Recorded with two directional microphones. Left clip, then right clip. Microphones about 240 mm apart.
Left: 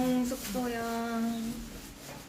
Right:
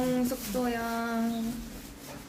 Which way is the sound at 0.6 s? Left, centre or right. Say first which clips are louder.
Right 1 dB; right.